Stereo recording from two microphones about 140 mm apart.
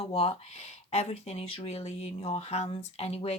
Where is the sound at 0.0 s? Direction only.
45° left (ahead or behind).